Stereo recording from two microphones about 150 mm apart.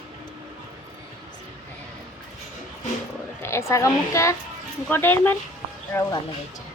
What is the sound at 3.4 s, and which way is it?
A woman's voice, 20° left (ahead or behind).